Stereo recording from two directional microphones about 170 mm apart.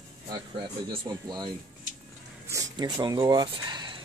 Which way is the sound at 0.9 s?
25° right (ahead or behind).